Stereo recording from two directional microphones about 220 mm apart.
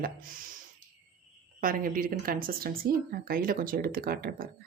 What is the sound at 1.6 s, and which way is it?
Speech, 40° right (ahead or behind).